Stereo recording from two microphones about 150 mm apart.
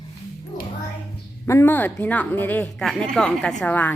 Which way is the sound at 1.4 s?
15° left (ahead or behind).